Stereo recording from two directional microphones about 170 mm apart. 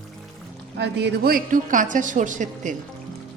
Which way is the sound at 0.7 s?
85° right.